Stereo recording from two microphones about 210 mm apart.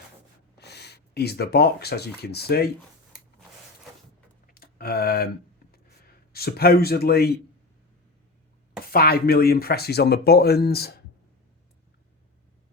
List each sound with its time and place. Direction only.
0.6 s speech: 50° left (ahead or behind)
4.4 s a sound: 45° left (ahead or behind)
6.3 s speech: 45° left (ahead or behind)
8.9 s speech: 45° left (ahead or behind)